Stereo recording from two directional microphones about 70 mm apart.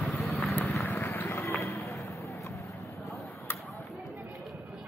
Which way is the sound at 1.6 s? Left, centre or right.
Left.